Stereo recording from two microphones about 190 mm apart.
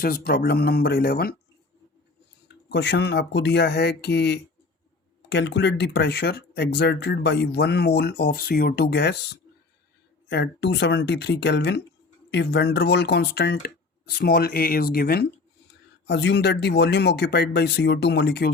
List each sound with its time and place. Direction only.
0.0 s speech: 50° left (ahead or behind)
2.6 s speech: 65° left (ahead or behind)